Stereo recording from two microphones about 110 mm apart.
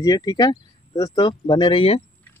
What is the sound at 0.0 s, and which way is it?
Speech, 35° left (ahead or behind).